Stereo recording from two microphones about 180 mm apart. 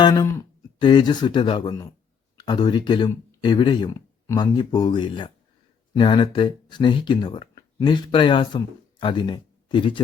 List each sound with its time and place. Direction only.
0.0 s speech: 25° left (ahead or behind)